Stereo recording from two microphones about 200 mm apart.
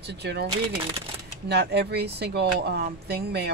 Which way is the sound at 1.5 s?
55° right (ahead or behind).